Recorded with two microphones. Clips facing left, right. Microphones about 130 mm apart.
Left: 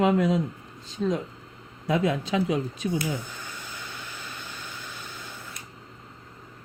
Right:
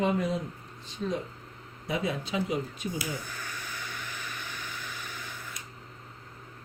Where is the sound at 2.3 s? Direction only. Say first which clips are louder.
Left 4 dB; 90° left.